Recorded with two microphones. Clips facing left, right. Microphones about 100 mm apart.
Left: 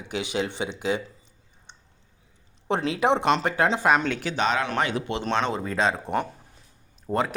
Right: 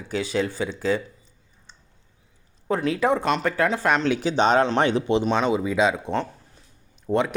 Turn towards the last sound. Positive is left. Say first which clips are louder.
# right 3 dB
turn(degrees=0)  # may be behind; listen again after turning